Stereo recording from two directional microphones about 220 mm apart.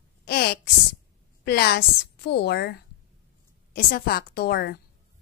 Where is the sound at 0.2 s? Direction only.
45° left (ahead or behind).